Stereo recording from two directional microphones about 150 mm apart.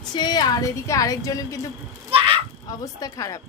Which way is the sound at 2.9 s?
25° left (ahead or behind).